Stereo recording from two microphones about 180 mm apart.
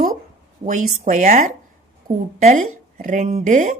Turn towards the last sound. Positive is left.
turn(degrees=-45)  # may be behind; listen again after turning